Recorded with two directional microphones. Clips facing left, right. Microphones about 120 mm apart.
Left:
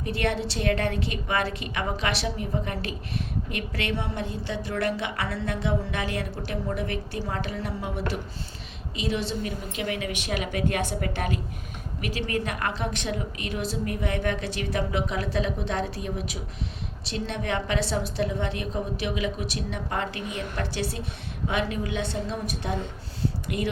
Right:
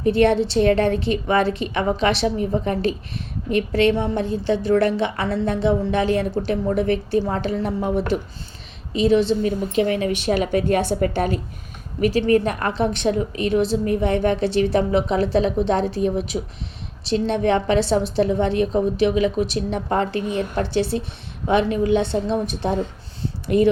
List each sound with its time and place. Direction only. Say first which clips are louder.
0.0 s a woman's voice: right 11 dB; 30° right (ahead or behind)